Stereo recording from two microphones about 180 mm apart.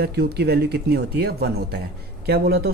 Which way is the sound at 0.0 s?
60° right (ahead or behind).